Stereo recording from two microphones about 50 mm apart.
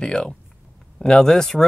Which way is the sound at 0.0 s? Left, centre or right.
Centre.